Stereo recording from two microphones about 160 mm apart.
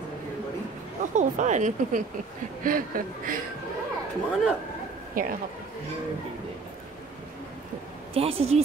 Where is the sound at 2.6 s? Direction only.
60° right (ahead or behind).